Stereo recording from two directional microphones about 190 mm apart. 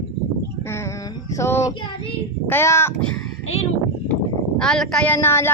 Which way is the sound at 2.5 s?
15° left (ahead or behind).